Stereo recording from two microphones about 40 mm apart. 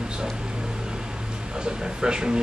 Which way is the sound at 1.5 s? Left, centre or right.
Right.